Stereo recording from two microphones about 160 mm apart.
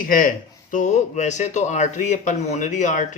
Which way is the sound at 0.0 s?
60° left (ahead or behind).